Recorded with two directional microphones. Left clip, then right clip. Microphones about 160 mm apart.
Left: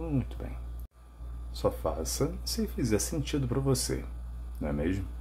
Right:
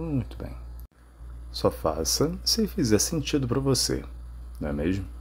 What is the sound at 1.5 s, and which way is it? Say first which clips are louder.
Speech: right 5 dB; 25° right (ahead or behind).